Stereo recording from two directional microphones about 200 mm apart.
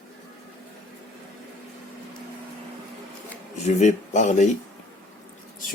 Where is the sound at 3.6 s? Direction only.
35° left (ahead or behind).